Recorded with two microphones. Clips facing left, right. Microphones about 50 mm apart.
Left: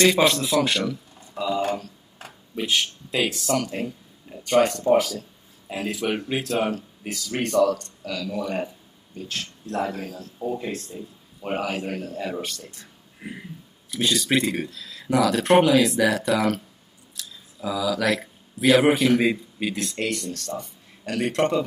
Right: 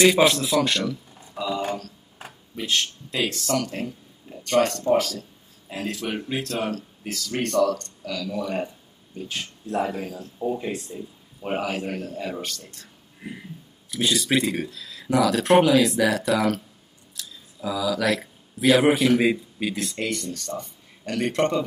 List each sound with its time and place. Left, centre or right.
0.0 s speech: centre
1.1 s a sound: centre
2.7 s speech: centre
9.2 s speech: centre
10.1 s speech: right
10.5 s speech: centre
11.0 s speech: centre
13.8 s speech: centre
20.5 s a sound: centre
21.3 s speech: centre